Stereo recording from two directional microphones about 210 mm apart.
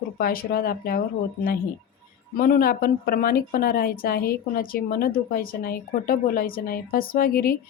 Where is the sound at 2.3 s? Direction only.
45° left (ahead or behind).